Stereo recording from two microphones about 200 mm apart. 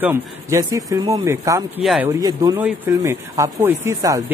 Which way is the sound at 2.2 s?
20° right (ahead or behind).